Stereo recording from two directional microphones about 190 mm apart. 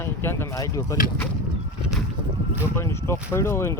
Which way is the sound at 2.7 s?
15° left (ahead or behind).